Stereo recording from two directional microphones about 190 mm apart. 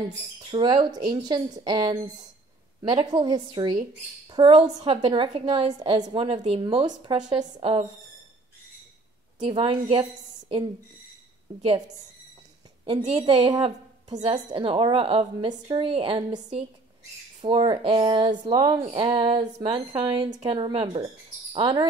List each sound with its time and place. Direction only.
0.4 s a woman's voice: 25° right (ahead or behind)
9.4 s a woman's voice: 30° right (ahead or behind)
12.8 s a woman's voice: 30° right (ahead or behind)